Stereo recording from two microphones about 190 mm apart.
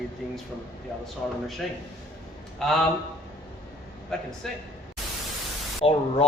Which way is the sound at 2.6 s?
Centre (ahead or behind).